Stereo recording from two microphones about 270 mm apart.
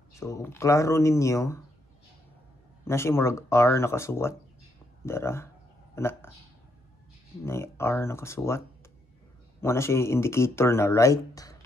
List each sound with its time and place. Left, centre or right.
0.1 s speech: centre
2.9 s speech: centre
7.4 s speech: centre